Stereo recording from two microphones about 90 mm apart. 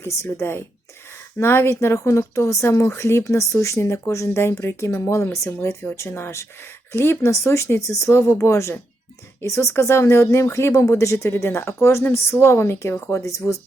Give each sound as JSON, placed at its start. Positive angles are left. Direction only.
{"t": 0.0, "sound": "a woman's voice", "side_deg": 30}